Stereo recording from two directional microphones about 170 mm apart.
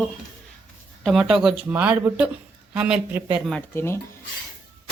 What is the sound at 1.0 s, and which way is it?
A woman's voice, centre (ahead or behind).